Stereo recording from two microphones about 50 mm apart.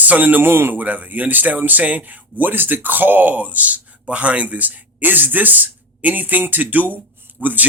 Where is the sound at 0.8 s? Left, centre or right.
Right.